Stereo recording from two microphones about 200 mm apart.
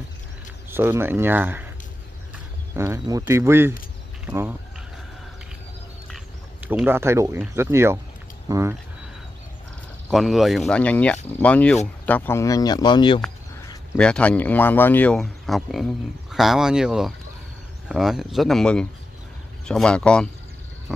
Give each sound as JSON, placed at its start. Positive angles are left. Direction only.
{"t": 0.7, "sound": "speech", "side_deg": -10}
{"t": 2.7, "sound": "speech", "side_deg": -15}
{"t": 6.0, "sound": "speech", "side_deg": -5}
{"t": 10.0, "sound": "speech", "side_deg": 0}
{"t": 13.9, "sound": "speech", "side_deg": 5}